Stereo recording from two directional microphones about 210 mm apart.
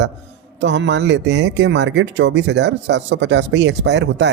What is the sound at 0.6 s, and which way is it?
Speech, 60° right (ahead or behind).